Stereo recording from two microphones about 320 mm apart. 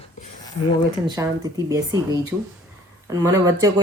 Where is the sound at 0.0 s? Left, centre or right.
Centre.